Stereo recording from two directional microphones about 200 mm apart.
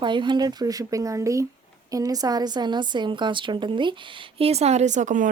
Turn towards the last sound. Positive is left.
turn(degrees=-40)  # may be behind; listen again after turning